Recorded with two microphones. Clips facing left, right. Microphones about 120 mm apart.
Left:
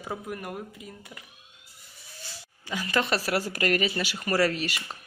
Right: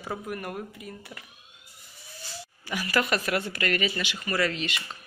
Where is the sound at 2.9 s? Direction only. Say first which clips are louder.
Even; 30° left (ahead or behind).